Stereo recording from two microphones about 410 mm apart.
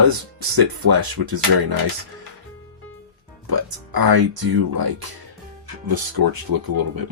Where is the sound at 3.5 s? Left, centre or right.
Right.